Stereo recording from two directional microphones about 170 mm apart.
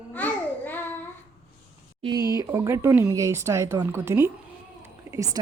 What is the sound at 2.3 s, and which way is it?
Speech, 20° right (ahead or behind).